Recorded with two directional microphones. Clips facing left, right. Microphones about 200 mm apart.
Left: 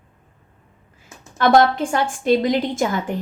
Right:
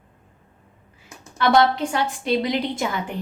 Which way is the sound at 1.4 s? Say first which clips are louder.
Left 3 dB; 50° left (ahead or behind).